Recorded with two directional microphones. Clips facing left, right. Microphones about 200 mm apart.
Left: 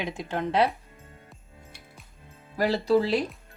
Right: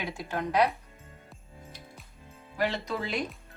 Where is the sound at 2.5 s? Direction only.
35° left (ahead or behind).